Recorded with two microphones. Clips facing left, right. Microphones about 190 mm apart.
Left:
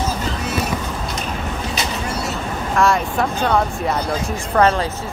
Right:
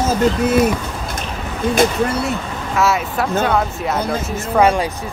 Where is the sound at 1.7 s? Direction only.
55° right (ahead or behind).